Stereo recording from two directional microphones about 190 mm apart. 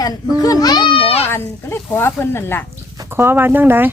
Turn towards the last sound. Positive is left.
turn(degrees=-10)  # may be behind; listen again after turning